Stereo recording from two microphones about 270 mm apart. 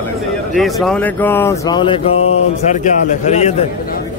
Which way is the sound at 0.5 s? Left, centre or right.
Centre.